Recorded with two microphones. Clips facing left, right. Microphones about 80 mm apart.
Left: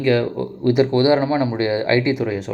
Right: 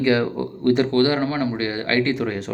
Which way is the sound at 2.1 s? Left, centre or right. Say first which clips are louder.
Left 2 dB; centre.